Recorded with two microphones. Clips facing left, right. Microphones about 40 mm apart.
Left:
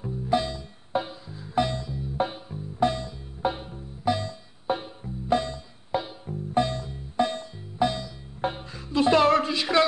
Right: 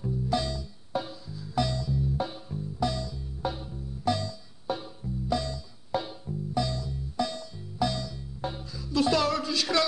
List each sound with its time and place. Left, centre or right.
0.0 s music: left
4.0 s music: left
4.3 s music: left
8.4 s music: left
9.6 s a man's voice: left